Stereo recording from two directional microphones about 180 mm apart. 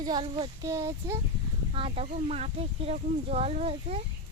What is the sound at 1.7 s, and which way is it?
Speech, 30° right (ahead or behind).